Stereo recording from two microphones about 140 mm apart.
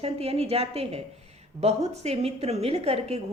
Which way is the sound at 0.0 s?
45° right (ahead or behind).